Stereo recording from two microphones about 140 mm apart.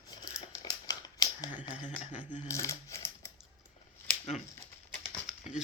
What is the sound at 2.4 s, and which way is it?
Speech, 20° left (ahead or behind).